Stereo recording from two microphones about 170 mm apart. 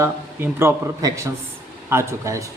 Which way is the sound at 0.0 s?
15° right (ahead or behind).